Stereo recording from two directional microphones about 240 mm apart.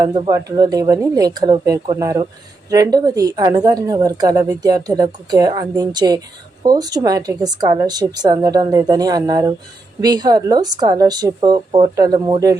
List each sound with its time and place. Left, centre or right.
0.0 s speech: centre